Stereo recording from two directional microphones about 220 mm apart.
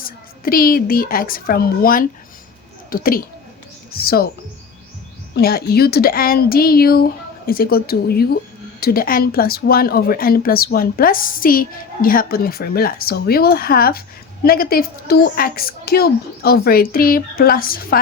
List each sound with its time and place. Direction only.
0.0 s a child's voice: 40° left (ahead or behind)
5.3 s a woman's voice: 45° left (ahead or behind)